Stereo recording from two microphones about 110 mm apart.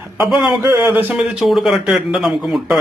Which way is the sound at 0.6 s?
25° right (ahead or behind).